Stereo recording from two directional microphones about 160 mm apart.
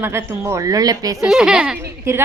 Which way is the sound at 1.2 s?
5° right (ahead or behind).